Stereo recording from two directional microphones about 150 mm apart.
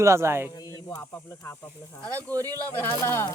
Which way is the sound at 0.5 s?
25° left (ahead or behind).